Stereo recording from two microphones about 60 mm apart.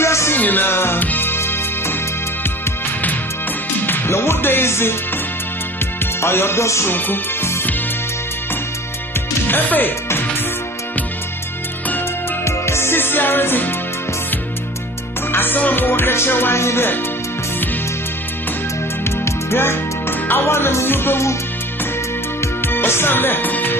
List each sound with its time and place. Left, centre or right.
0.0 s music: left
0.3 s music: left
3.8 s music: left
6.2 s music: left
6.9 s music: left
9.5 s music: left
12.4 s music: left
15.3 s music: left
19.0 s music: left
22.6 s music: left